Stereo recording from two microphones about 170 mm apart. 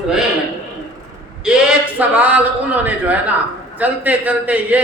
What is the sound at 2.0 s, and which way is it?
A man's voice, 10° right (ahead or behind).